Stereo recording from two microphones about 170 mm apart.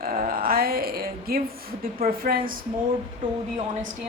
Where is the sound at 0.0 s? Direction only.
55° right (ahead or behind).